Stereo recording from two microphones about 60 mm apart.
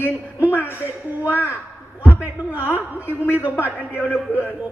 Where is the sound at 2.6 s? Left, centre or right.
Left.